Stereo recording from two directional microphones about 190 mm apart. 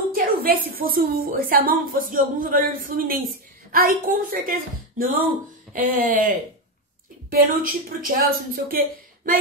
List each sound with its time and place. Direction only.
0.1 s a woman's voice: 50° right (ahead or behind)